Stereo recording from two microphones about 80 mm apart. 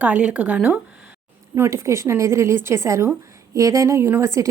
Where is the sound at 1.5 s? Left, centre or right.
Right.